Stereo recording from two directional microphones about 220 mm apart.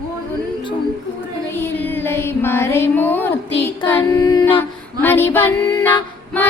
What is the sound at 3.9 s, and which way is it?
Female singing, 15° left (ahead or behind).